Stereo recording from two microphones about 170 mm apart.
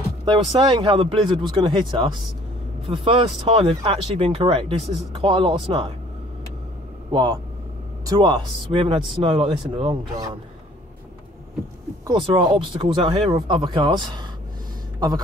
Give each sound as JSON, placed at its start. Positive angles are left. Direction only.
{"t": 0.2, "sound": "speech", "side_deg": -25}
{"t": 7.1, "sound": "speech", "side_deg": -25}
{"t": 12.1, "sound": "speech", "side_deg": -30}
{"t": 15.0, "sound": "a sound", "side_deg": -25}